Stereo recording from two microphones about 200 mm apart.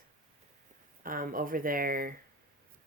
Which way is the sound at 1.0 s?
45° right (ahead or behind).